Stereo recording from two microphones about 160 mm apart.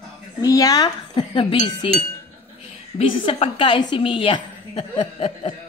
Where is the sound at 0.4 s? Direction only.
20° left (ahead or behind).